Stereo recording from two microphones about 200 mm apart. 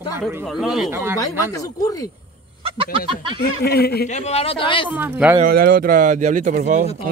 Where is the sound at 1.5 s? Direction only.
20° left (ahead or behind).